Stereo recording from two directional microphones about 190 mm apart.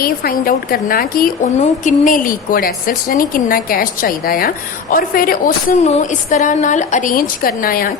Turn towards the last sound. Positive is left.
turn(degrees=50)  # may be behind; listen again after turning